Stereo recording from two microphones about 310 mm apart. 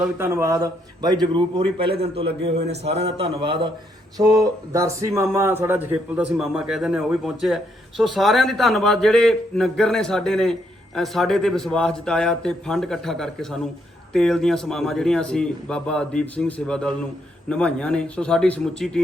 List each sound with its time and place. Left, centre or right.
0.0 s speech: centre